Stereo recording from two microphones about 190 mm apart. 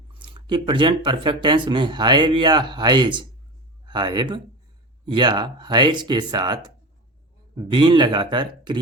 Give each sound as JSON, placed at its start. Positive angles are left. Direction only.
{"t": 0.1, "sound": "speech", "side_deg": -25}